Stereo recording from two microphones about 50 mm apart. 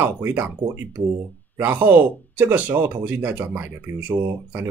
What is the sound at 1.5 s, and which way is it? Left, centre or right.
Speech, right.